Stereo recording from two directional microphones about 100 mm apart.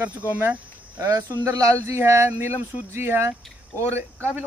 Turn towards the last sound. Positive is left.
turn(degrees=-25)  # may be behind; listen again after turning